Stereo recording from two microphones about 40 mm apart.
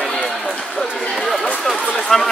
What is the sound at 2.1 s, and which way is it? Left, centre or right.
Speech, centre.